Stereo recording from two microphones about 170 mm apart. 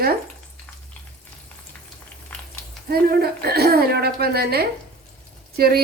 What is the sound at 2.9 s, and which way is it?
A woman's voice, 65° right (ahead or behind).